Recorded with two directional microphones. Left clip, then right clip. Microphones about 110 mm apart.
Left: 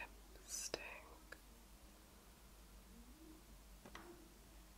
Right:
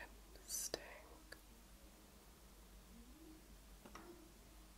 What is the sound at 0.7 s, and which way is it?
Whispering, 15° right (ahead or behind).